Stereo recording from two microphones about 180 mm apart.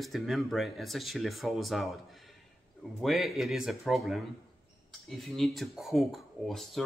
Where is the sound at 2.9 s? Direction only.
Centre (ahead or behind).